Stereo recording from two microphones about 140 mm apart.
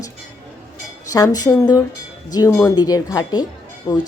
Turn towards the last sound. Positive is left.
turn(degrees=30)  # may be behind; listen again after turning